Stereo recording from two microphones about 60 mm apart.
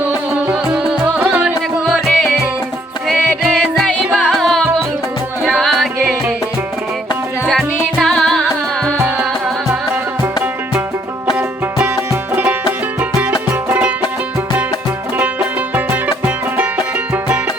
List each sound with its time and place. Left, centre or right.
0.5 s music: centre
1.9 s music: centre
7.9 s music: centre
12.3 s music: right
15.7 s music: right